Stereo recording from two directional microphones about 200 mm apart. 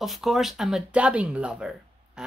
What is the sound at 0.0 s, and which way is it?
Speech, centre (ahead or behind).